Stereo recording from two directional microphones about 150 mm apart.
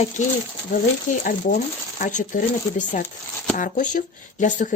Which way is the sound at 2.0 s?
55° left (ahead or behind).